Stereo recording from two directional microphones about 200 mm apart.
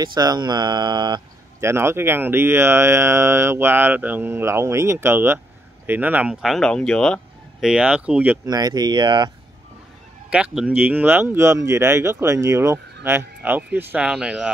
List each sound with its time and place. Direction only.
0.0 s speech: 20° right (ahead or behind)
8.5 s speech: 20° right (ahead or behind)
10.3 s speech: 5° right (ahead or behind)